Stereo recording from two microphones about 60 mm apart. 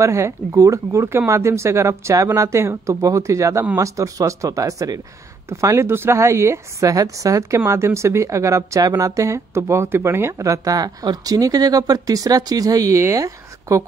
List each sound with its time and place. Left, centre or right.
0.0 s a woman's voice: right
5.5 s speech: right
6.9 s a woman's voice: right
10.4 s speech: right
13.1 s speech: right